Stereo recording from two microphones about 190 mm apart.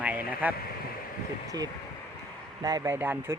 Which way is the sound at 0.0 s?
10° right (ahead or behind).